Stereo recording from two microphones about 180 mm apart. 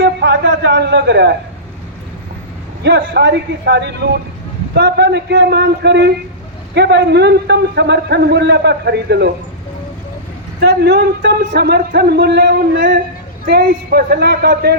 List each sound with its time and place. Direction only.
0.0 s a sound: 75° right (ahead or behind)
2.8 s a man's voice: 80° right
10.6 s speech: 65° right (ahead or behind)